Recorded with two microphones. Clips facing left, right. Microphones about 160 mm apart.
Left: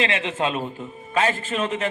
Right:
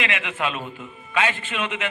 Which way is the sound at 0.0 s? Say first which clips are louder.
Left 3 dB; 30° left (ahead or behind).